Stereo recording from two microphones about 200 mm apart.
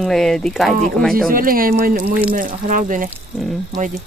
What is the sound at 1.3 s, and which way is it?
Speech, 45° right (ahead or behind).